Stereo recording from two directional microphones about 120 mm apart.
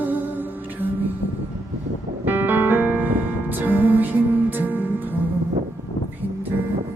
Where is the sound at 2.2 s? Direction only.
15° right (ahead or behind).